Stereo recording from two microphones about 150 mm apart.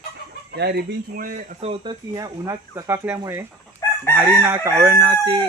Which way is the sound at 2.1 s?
25° right (ahead or behind).